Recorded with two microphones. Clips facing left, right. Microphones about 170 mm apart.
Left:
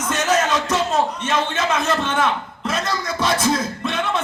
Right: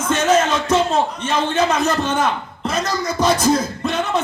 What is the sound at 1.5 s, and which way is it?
Speech, 40° right (ahead or behind).